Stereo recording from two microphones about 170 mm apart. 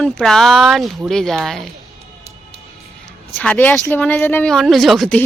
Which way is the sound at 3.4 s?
10° left (ahead or behind).